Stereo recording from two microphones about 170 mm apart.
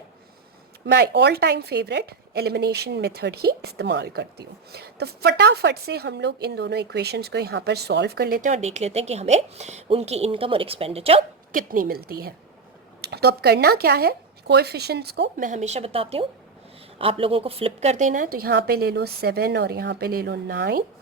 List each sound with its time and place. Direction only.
0.9 s a woman's voice: 90° right; by 11.2 s 35° right (ahead or behind)
11.5 s a woman's voice: 55° right (ahead or behind)
15.4 s a woman's voice: 40° right (ahead or behind); by 20.8 s 70° right (ahead or behind)